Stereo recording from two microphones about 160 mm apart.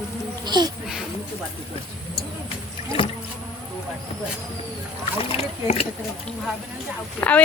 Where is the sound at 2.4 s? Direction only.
35° left (ahead or behind).